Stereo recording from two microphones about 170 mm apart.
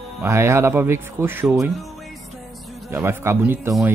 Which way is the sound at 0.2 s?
15° right (ahead or behind).